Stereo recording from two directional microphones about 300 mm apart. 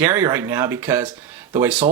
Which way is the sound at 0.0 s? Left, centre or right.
Centre.